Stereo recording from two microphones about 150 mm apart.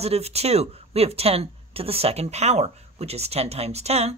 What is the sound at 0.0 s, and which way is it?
Speech, 45° right (ahead or behind).